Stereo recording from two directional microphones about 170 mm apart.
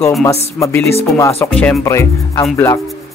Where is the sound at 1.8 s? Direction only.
20° left (ahead or behind).